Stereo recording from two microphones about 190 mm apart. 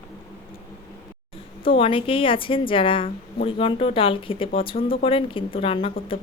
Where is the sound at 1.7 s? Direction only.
30° left (ahead or behind).